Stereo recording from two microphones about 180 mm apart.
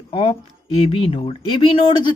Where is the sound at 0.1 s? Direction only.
30° left (ahead or behind).